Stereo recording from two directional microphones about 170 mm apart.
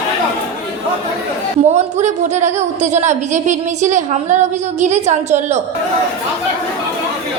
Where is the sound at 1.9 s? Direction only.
45° right (ahead or behind).